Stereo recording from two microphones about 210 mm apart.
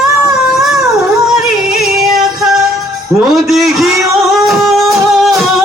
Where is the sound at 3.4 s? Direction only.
Centre (ahead or behind).